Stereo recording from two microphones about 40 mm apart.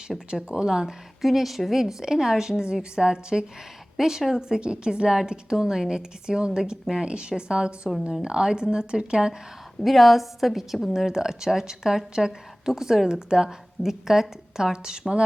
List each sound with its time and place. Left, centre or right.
0.1 s a woman's voice: centre
0.4 s a woman's voice: centre
1.2 s a woman's voice: centre
9.8 s a woman's voice: centre